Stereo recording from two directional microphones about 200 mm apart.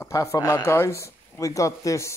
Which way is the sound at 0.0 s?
15° left (ahead or behind).